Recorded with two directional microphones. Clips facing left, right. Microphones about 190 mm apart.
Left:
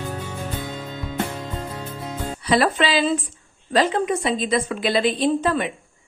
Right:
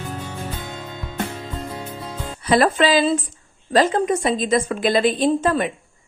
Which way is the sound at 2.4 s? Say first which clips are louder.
Right 3 dB; 45° right (ahead or behind).